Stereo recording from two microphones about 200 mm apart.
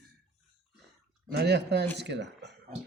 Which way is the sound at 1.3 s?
55° right (ahead or behind).